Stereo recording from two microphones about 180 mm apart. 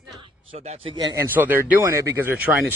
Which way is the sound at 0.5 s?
35° right (ahead or behind).